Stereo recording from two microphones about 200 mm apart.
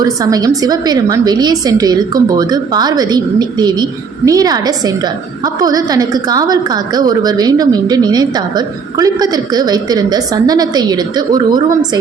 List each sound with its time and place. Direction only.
0.0 s a woman's voice: 20° right (ahead or behind)